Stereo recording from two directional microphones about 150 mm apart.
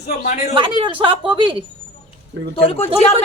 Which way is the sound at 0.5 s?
35° right (ahead or behind).